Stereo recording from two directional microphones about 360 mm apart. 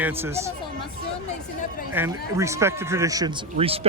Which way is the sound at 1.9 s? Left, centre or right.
Centre.